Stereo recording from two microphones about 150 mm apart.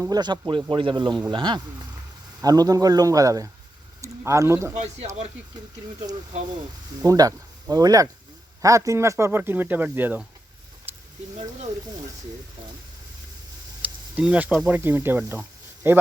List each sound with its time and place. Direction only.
0.0 s speech: 25° right (ahead or behind)
7.0 s speech: 25° right (ahead or behind)
10.9 s a sound: 15° right (ahead or behind)
13.8 s speech: 10° right (ahead or behind)